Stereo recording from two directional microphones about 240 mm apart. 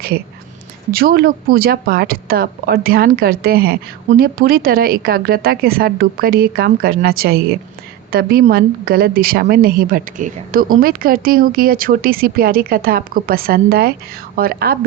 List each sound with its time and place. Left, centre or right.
0.9 s a woman's voice: right